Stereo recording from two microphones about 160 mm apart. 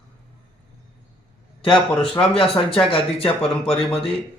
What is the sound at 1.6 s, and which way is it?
Speech, 30° left (ahead or behind).